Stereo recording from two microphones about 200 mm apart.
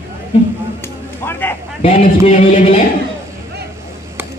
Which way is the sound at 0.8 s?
10° left (ahead or behind).